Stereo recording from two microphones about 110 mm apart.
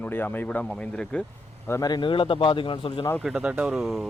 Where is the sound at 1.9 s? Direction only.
50° left (ahead or behind).